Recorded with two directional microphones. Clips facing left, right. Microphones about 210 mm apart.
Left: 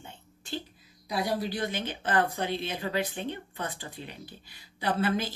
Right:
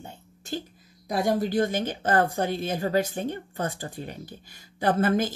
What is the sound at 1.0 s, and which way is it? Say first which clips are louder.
Speech: right 5 dB; 45° right (ahead or behind).